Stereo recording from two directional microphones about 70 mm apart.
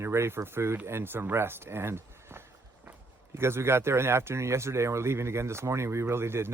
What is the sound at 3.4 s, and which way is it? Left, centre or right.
Speech, right.